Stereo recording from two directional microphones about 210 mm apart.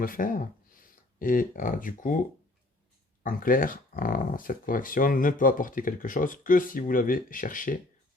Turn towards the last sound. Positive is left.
turn(degrees=40)  # may be behind; listen again after turning